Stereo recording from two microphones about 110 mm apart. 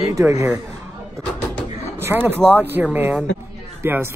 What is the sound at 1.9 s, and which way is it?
Speech, 20° right (ahead or behind).